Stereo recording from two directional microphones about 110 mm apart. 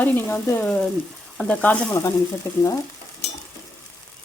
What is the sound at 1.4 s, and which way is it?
Sizzle, 10° left (ahead or behind).